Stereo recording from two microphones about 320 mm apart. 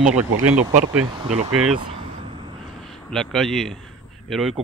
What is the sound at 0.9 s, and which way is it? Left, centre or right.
Speech, centre.